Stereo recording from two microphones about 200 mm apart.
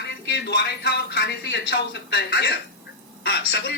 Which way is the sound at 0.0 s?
55° left (ahead or behind).